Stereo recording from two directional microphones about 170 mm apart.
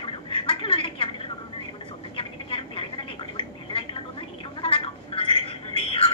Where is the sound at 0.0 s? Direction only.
35° left (ahead or behind).